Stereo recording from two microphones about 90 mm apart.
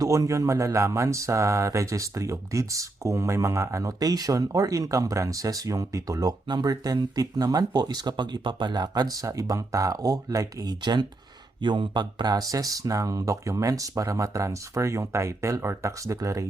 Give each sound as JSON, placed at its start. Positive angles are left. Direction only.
{"t": 0.0, "sound": "speech", "side_deg": -40}